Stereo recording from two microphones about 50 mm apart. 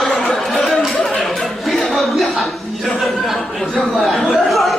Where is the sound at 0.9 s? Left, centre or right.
Centre.